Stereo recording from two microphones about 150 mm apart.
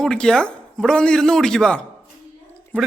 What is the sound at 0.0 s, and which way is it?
A man's voice, 5° left (ahead or behind).